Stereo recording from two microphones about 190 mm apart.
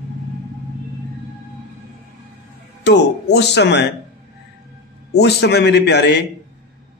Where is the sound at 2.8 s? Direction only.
65° left (ahead or behind).